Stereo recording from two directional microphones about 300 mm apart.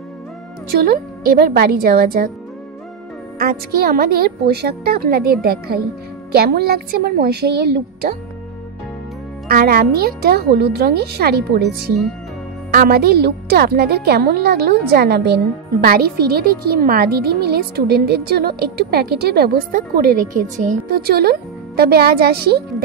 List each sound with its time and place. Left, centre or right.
0.7 s a woman's voice: right
3.3 s speech: right
9.5 s speech: right